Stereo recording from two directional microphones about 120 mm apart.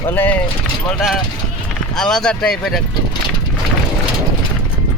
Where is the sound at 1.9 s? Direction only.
5° left (ahead or behind).